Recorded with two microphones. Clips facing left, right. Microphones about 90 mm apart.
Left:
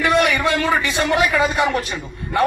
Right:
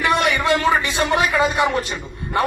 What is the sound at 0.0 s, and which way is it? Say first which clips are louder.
A man's voice: left 2 dB; 25° right (ahead or behind).